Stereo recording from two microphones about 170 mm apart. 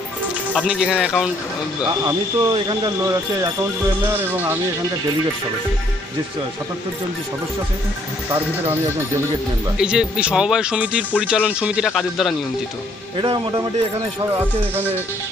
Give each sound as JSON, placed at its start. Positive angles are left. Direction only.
{"t": 0.7, "sound": "speech", "side_deg": -5}
{"t": 2.0, "sound": "speech", "side_deg": -20}
{"t": 4.1, "sound": "music", "side_deg": -10}
{"t": 9.8, "sound": "speech", "side_deg": -5}
{"t": 13.2, "sound": "speech", "side_deg": -30}
{"t": 14.3, "sound": "music", "side_deg": -15}